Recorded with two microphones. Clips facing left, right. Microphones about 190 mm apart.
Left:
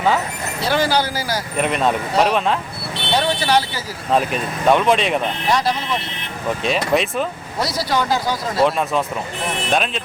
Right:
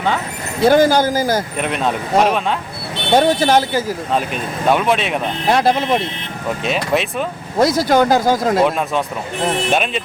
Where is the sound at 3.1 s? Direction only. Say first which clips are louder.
Right 5 dB; 45° right (ahead or behind).